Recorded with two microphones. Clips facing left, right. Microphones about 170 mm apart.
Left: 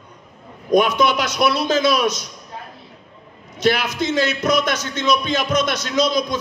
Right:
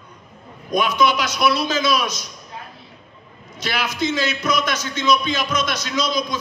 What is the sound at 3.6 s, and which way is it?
A man's voice, 55° left (ahead or behind).